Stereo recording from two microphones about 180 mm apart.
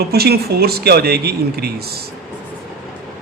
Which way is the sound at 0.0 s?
60° right (ahead or behind).